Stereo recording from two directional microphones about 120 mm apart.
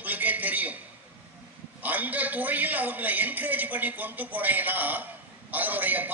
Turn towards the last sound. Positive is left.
turn(degrees=-15)  # may be behind; listen again after turning